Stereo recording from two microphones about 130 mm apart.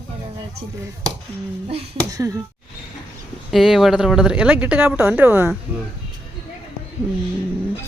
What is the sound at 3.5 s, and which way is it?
A woman's voice, centre (ahead or behind).